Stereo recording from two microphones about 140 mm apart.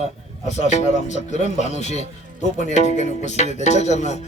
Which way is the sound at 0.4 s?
55° left (ahead or behind).